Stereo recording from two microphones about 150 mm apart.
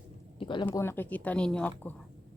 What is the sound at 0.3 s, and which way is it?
Speech, 35° left (ahead or behind).